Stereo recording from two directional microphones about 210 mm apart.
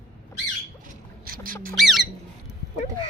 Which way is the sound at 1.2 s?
45° right (ahead or behind).